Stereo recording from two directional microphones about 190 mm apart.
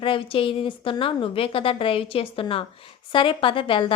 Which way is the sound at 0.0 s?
25° left (ahead or behind).